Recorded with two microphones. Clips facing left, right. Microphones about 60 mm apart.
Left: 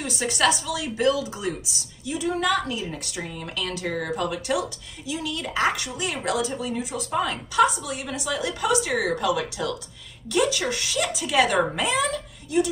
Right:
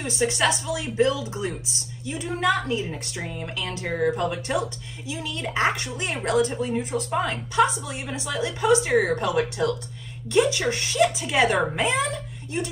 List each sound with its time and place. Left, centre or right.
0.0 s a woman's voice: right
4.2 s a woman's voice: right
7.1 s a woman's voice: right